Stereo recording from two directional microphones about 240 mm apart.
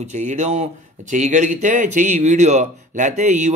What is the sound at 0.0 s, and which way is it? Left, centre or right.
Speech, right.